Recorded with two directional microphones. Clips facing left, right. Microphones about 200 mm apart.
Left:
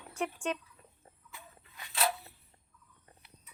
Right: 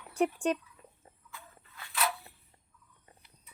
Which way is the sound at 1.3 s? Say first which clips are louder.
Right 1 dB; 20° left (ahead or behind).